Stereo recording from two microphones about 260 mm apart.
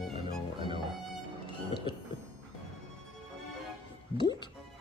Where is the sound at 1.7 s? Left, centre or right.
Centre.